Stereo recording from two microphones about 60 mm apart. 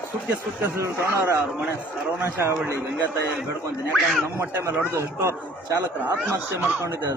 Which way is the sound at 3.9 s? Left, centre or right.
Centre.